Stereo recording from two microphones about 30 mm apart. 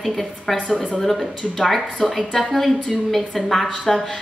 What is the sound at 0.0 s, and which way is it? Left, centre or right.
A woman's voice, centre.